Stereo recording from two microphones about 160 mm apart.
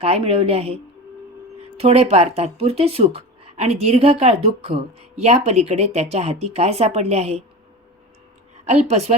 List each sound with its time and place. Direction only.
0.0 s speech: 40° right (ahead or behind)
8.6 s a woman's voice: 45° right (ahead or behind)